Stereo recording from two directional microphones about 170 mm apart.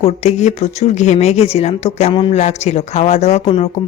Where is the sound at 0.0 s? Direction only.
40° left (ahead or behind).